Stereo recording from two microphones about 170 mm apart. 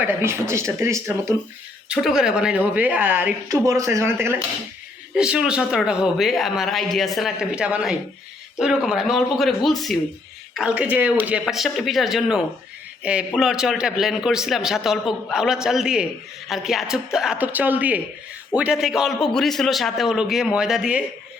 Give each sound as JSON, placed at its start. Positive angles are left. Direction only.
{"t": 0.0, "sound": "a woman's voice", "side_deg": -15}
{"t": 1.9, "sound": "a woman's voice", "side_deg": 0}